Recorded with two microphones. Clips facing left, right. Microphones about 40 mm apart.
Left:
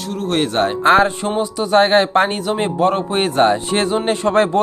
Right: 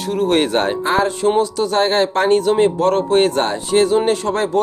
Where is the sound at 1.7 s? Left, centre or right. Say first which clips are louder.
Left 5 dB; left.